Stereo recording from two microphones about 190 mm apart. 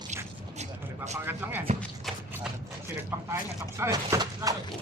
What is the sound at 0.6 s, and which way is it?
Vehicle, 35° right (ahead or behind).